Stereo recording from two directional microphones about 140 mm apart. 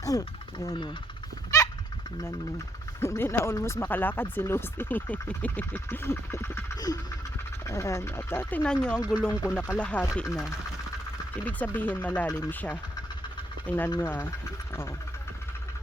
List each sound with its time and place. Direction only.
0.0 s speech: 25° left (ahead or behind)
1.5 s fowl: 25° left (ahead or behind)
3.0 s speech: 20° left (ahead or behind)
9.0 s speech: 5° right (ahead or behind)
9.7 s speech: 10° left (ahead or behind)
11.4 s speech: 10° left (ahead or behind)